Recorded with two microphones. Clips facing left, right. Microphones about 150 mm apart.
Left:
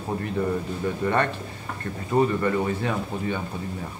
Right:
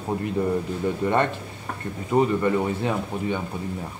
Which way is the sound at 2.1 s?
20° right (ahead or behind).